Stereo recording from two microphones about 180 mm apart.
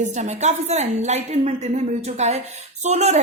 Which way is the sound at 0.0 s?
40° right (ahead or behind).